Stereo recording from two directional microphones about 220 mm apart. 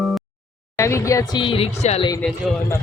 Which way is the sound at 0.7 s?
15° left (ahead or behind).